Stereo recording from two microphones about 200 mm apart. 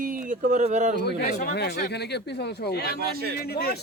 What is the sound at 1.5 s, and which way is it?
A man's voice, 55° left (ahead or behind).